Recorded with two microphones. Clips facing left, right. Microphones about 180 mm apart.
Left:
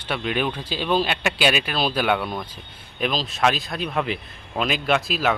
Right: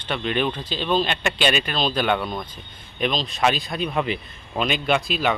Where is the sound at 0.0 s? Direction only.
5° left (ahead or behind).